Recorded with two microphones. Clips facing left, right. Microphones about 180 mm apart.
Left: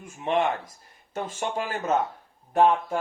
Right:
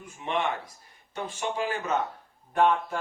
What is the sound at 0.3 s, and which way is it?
A man's voice, 45° left (ahead or behind).